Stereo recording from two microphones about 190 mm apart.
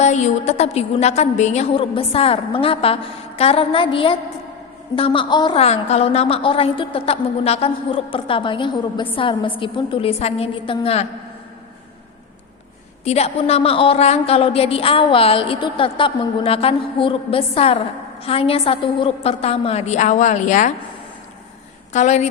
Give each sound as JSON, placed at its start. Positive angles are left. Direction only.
{"t": 0.0, "sound": "a woman's voice", "side_deg": 35}
{"t": 13.1, "sound": "a woman's voice", "side_deg": 35}
{"t": 21.9, "sound": "a woman's voice", "side_deg": 40}